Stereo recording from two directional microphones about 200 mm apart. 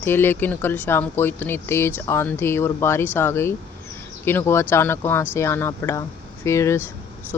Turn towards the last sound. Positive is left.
turn(degrees=15)  # may be behind; listen again after turning